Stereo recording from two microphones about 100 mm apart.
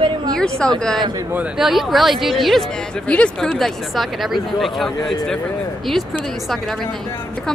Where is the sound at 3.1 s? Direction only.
10° left (ahead or behind).